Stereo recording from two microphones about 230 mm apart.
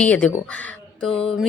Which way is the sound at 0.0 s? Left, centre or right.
Centre.